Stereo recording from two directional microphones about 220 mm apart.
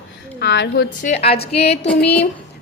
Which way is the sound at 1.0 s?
30° left (ahead or behind).